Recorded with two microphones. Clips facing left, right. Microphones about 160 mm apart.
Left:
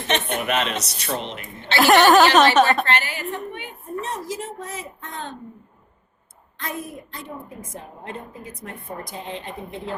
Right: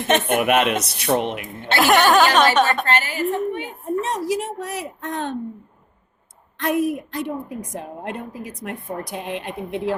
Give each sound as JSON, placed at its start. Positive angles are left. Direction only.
{"t": 0.1, "sound": "a woman's voice", "side_deg": -50}
{"t": 1.8, "sound": "a sound", "side_deg": 0}
{"t": 2.8, "sound": "a woman's voice", "side_deg": -45}
{"t": 4.0, "sound": "a woman's voice", "side_deg": -70}
{"t": 6.6, "sound": "a woman's voice", "side_deg": -70}